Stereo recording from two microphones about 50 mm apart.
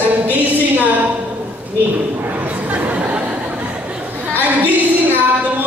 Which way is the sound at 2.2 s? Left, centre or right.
Right.